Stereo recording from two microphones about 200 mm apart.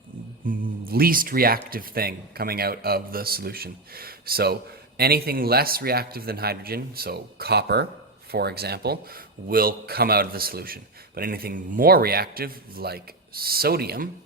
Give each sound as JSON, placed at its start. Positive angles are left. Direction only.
{"t": 0.4, "sound": "a man's voice", "side_deg": -50}